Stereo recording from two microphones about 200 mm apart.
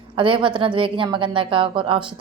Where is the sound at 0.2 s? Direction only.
25° right (ahead or behind).